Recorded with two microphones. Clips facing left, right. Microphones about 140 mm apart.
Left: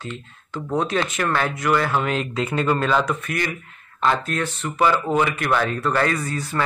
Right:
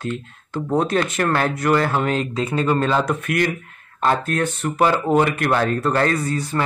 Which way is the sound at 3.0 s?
55° right (ahead or behind).